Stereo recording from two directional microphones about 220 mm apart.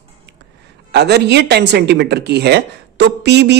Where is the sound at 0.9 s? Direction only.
50° right (ahead or behind).